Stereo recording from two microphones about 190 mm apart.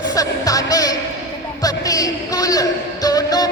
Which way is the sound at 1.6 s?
20° left (ahead or behind).